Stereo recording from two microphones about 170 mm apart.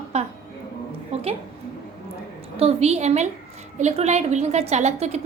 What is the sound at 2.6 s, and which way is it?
A woman's voice, 35° right (ahead or behind).